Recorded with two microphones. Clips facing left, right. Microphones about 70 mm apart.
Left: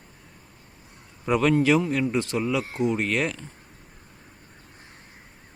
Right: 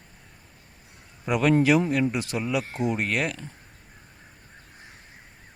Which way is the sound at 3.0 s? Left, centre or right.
Centre.